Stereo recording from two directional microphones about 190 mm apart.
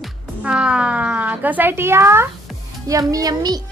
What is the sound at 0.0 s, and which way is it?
Music, 5° right (ahead or behind).